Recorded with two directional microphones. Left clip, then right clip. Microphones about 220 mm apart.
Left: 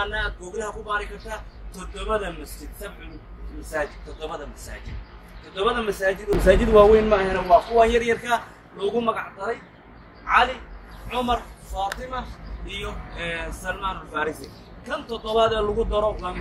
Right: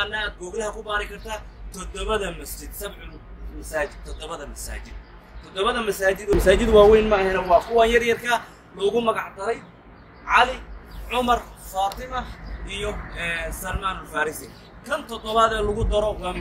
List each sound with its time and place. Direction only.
0.0 s a man's voice: 30° right (ahead or behind)
3.7 s a man's voice: 40° right (ahead or behind)